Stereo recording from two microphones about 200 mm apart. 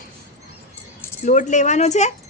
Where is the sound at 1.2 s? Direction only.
40° left (ahead or behind).